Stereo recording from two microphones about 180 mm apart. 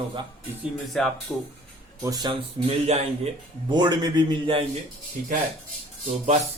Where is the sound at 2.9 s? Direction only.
35° right (ahead or behind).